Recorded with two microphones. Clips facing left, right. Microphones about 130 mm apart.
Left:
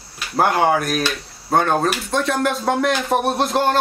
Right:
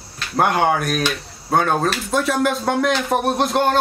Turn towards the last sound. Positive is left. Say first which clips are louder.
# right 1 dB
turn(degrees=0)  # may be behind; listen again after turning